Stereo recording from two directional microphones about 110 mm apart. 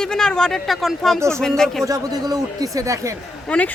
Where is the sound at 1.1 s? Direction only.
25° right (ahead or behind).